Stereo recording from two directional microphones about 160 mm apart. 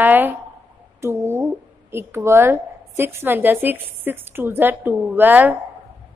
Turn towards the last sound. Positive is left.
turn(degrees=-10)  # may be behind; listen again after turning